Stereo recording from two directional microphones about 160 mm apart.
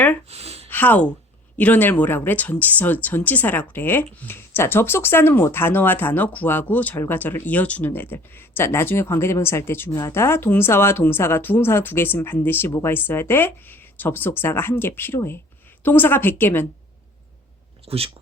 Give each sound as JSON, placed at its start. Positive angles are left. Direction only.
{"t": 0.3, "sound": "a sound", "side_deg": -40}
{"t": 0.7, "sound": "speech", "side_deg": 10}
{"t": 17.8, "sound": "speech", "side_deg": -40}